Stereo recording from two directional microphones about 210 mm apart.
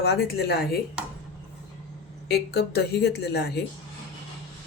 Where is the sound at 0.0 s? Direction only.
50° left (ahead or behind).